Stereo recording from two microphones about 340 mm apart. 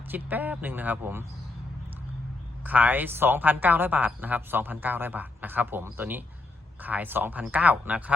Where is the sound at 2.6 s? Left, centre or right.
Centre.